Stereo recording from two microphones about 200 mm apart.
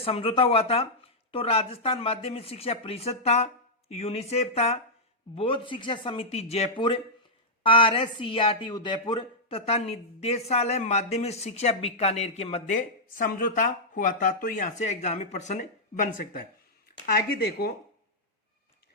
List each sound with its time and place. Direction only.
0.0 s speech: 30° left (ahead or behind); by 17.7 s 50° left (ahead or behind)